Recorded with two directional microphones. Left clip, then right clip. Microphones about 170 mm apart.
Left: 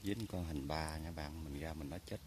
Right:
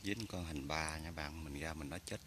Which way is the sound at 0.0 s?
15° left (ahead or behind).